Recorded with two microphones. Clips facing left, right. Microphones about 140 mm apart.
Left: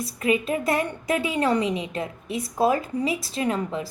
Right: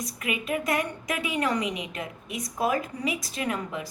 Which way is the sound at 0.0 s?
30° left (ahead or behind).